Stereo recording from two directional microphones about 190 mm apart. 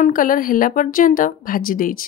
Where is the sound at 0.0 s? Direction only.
45° left (ahead or behind).